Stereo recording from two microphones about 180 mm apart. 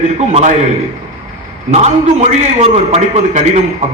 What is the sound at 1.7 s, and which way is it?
A man's voice, 40° right (ahead or behind).